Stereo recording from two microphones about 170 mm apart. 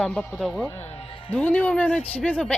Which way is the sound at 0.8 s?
35° left (ahead or behind).